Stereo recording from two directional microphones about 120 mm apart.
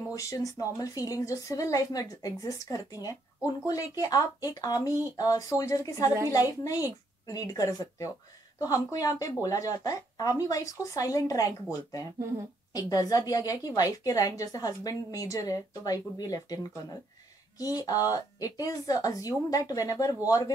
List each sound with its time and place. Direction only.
0.1 s a woman's voice: 25° left (ahead or behind)
12.7 s a woman's voice: 30° left (ahead or behind)